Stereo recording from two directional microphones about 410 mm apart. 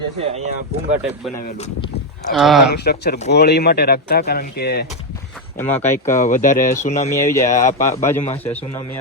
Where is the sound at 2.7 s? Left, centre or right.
Left.